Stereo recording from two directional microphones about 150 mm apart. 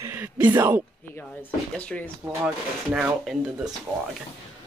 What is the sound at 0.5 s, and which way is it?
Speech, 15° right (ahead or behind).